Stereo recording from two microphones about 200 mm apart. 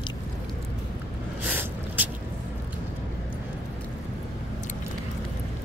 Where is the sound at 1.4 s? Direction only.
10° right (ahead or behind).